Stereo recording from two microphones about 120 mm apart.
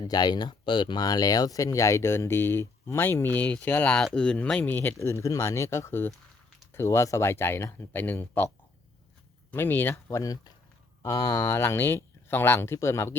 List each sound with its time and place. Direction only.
0.0 s speech: 35° left (ahead or behind); by 8.4 s 15° left (ahead or behind)
9.5 s speech: 15° left (ahead or behind)